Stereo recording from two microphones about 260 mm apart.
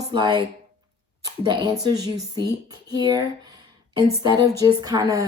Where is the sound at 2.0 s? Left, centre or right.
Centre.